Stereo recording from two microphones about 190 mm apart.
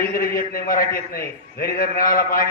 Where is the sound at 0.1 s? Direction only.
50° left (ahead or behind).